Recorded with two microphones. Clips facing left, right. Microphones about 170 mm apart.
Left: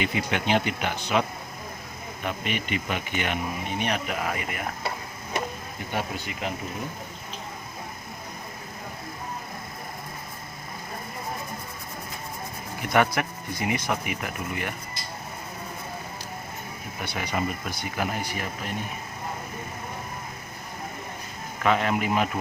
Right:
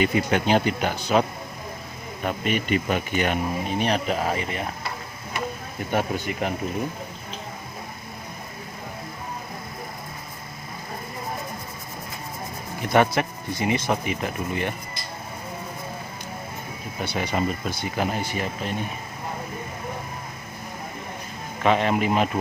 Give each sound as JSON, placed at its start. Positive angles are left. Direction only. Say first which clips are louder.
{"t": 0.0, "sound": "speech", "louder": "right 5 dB", "side_deg": -40}
{"t": 2.2, "sound": "speech", "louder": "right 5 dB", "side_deg": -40}
{"t": 5.9, "sound": "speech", "louder": "right 6 dB", "side_deg": -50}
{"t": 12.9, "sound": "speech", "louder": "right 3 dB", "side_deg": -30}
{"t": 17.0, "sound": "speech", "louder": "right 4 dB", "side_deg": -30}
{"t": 21.6, "sound": "speech", "louder": "right 3 dB", "side_deg": -25}